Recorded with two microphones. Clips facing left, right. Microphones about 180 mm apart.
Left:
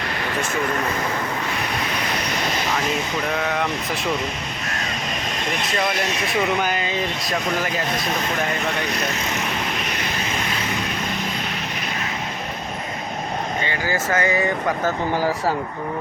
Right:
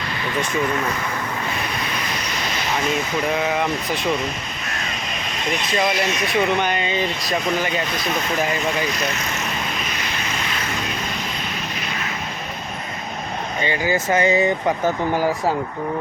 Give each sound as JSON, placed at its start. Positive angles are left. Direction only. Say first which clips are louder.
{"t": 3.3, "sound": "speech", "louder": "right 1 dB", "side_deg": -5}
{"t": 5.6, "sound": "speech", "louder": "right 3 dB", "side_deg": 0}
{"t": 13.7, "sound": "speech", "louder": "right 6 dB", "side_deg": -20}